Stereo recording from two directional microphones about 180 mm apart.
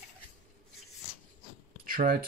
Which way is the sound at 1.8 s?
50° right (ahead or behind).